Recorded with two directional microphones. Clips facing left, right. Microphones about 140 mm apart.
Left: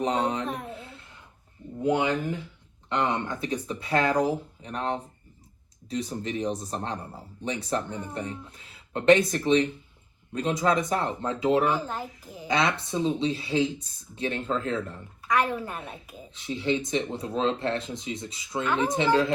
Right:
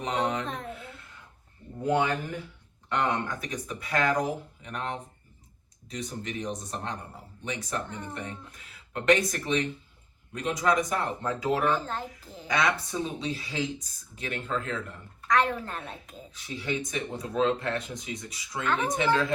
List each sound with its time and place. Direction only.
0.0 s speech: 30° left (ahead or behind)
1.8 s speech: 20° left (ahead or behind)
11.6 s a child's voice: 10° left (ahead or behind)
12.5 s speech: 25° left (ahead or behind)
15.3 s a child's voice: 10° left (ahead or behind)
16.3 s speech: 25° left (ahead or behind)